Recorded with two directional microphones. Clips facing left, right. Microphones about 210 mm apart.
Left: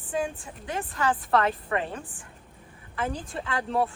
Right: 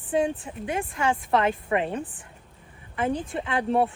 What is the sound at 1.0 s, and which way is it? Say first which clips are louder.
Speech: even; 25° right (ahead or behind).